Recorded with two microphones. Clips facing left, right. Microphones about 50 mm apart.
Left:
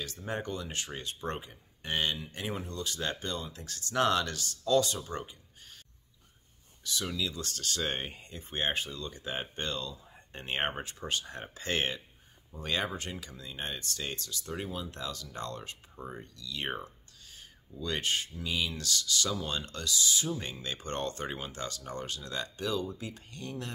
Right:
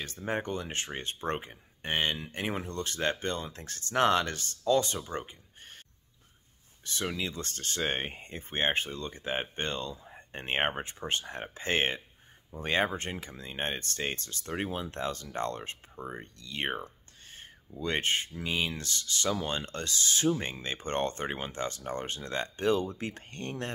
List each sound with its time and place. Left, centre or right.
0.0 s speech: right
6.8 s speech: right
16.8 s a sound: right
18.4 s speech: right